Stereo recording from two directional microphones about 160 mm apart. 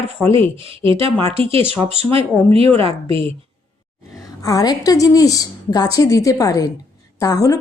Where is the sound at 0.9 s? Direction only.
35° right (ahead or behind).